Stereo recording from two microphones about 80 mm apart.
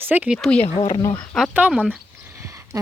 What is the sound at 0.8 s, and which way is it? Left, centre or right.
Speech, left.